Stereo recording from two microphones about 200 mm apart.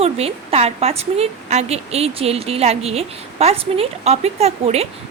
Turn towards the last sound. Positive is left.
turn(degrees=-30)  # may be behind; listen again after turning